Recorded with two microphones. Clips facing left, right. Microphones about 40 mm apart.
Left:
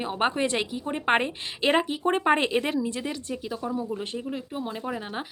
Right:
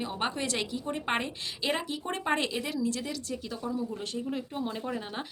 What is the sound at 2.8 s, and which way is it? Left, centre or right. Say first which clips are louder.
Speech: left 2 dB; left.